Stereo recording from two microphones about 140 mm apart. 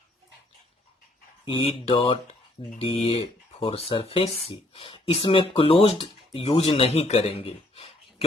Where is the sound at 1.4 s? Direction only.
40° left (ahead or behind).